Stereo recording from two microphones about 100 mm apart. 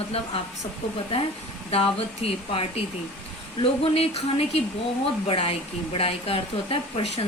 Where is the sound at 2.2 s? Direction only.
75° left (ahead or behind).